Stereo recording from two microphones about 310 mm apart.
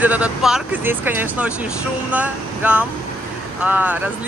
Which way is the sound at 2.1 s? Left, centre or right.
Centre.